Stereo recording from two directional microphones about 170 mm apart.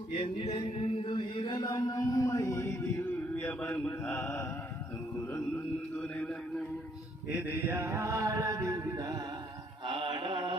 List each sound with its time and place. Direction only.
0.1 s mantra: 35° left (ahead or behind); by 2.9 s 15° left (ahead or behind)
3.3 s speech: 10° left (ahead or behind)
6.0 s a man's voice: 5° left (ahead or behind)
7.3 s mantra: 10° right (ahead or behind); by 10.5 s 30° right (ahead or behind)